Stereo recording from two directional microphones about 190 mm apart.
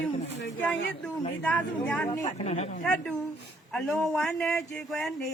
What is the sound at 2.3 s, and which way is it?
Speech, 35° left (ahead or behind).